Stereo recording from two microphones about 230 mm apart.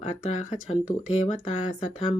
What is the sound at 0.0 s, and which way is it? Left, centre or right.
Speech, left.